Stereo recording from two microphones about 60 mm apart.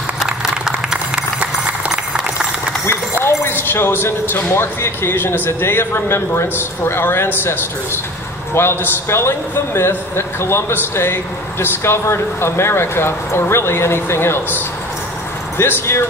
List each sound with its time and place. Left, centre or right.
0.3 s run: centre
2.9 s speech: left